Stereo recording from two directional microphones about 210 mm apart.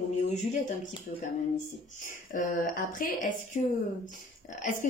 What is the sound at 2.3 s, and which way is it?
A woman's voice, 40° left (ahead or behind).